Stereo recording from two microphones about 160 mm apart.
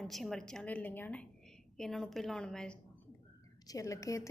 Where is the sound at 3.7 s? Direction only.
20° left (ahead or behind).